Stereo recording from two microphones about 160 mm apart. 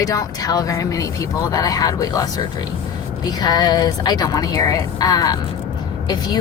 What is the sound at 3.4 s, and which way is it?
A woman's voice, 25° left (ahead or behind).